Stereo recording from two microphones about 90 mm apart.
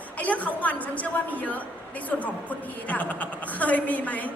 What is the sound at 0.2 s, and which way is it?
A woman's voice, 15° left (ahead or behind).